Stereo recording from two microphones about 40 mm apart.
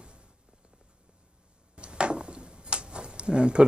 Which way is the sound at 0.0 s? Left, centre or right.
Right.